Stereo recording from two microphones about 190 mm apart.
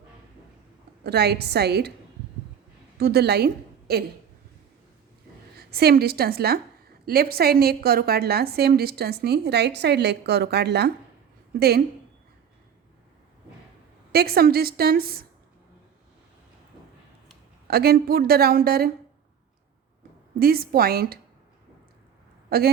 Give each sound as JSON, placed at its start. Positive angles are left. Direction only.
{"t": 1.0, "sound": "a woman's voice", "side_deg": -60}
{"t": 3.0, "sound": "a woman's voice", "side_deg": -60}
{"t": 5.5, "sound": "a woman's voice", "side_deg": -55}
{"t": 14.1, "sound": "a woman's voice", "side_deg": -55}
{"t": 17.7, "sound": "a woman's voice", "side_deg": -55}
{"t": 20.4, "sound": "a woman's voice", "side_deg": -50}
{"t": 22.4, "sound": "speech", "side_deg": -55}